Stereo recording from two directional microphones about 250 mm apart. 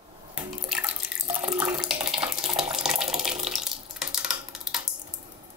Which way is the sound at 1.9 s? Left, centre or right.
Centre.